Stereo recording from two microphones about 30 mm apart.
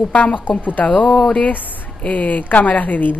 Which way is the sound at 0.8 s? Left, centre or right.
Left.